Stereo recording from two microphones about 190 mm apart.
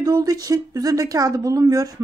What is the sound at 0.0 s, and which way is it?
Speech, 20° right (ahead or behind).